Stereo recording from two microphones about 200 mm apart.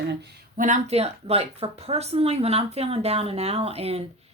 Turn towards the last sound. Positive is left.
turn(degrees=-30)  # may be behind; listen again after turning